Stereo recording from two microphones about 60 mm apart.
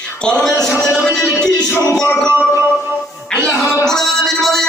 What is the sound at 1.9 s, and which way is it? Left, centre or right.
Speech, centre.